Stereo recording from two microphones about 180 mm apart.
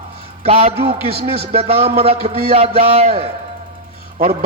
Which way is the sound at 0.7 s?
65° right (ahead or behind).